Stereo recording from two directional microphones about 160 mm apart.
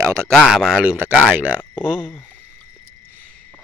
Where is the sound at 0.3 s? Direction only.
Centre (ahead or behind).